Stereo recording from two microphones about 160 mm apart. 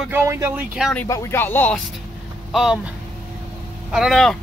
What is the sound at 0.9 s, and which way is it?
Speech, 20° left (ahead or behind).